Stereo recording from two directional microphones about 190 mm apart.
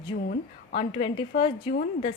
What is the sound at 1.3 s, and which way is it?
Speech, 55° left (ahead or behind).